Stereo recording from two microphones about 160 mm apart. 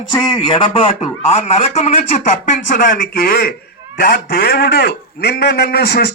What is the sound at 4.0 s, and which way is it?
A man's voice, 85° left.